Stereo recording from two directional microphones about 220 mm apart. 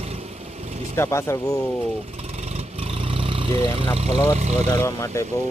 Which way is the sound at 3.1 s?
25° right (ahead or behind).